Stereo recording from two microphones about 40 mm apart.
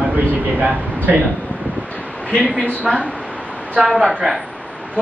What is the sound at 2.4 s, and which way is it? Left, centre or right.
A woman's voice, right.